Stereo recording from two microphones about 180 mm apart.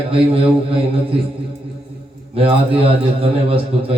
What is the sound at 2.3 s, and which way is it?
A man's voice, 30° right (ahead or behind).